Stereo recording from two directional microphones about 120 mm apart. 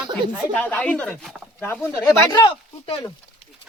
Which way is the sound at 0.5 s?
15° left (ahead or behind).